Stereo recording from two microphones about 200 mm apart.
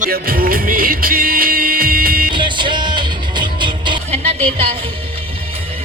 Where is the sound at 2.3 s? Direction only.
25° right (ahead or behind).